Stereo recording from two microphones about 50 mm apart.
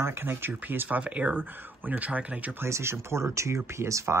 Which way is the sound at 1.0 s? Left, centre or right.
Right.